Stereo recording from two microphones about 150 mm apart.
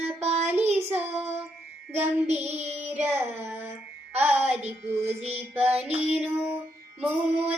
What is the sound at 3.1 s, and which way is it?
Child singing, 15° right (ahead or behind).